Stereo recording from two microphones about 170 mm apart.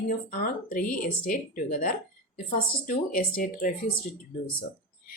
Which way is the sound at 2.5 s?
50° left (ahead or behind).